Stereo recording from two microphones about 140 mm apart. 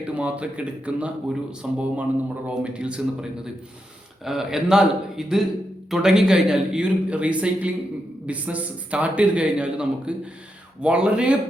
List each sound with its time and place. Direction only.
0.0 s a man's voice: 10° right (ahead or behind)